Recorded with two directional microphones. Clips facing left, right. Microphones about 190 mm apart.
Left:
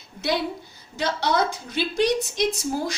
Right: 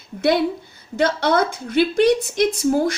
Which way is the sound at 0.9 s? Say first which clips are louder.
Right 5 dB; 55° right (ahead or behind).